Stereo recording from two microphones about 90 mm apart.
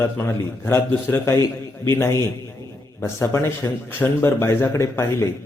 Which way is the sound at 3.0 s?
30° left (ahead or behind).